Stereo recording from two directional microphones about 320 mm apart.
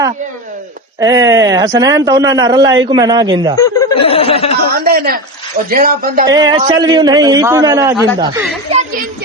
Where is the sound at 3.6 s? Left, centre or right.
Centre.